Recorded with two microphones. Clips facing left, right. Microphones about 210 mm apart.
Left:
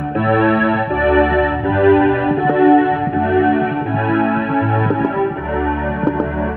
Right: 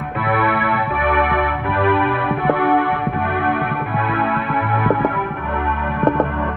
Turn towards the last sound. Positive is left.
turn(degrees=25)  # may be behind; listen again after turning